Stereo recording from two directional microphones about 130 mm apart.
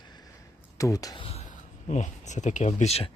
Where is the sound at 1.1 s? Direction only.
45° left (ahead or behind).